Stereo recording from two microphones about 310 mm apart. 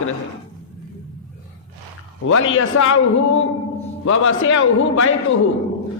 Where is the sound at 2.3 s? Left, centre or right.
Left.